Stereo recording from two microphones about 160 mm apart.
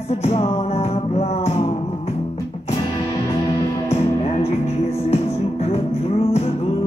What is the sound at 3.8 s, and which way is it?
Music, 40° left (ahead or behind).